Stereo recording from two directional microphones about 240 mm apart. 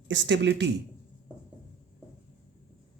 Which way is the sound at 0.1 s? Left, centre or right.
Right.